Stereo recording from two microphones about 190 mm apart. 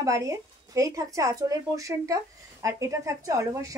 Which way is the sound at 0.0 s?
15° right (ahead or behind).